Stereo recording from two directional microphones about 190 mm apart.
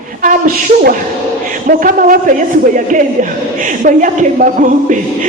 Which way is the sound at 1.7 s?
45° right (ahead or behind).